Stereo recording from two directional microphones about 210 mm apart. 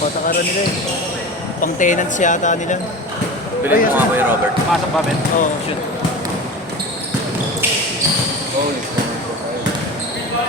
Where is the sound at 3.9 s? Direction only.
10° right (ahead or behind).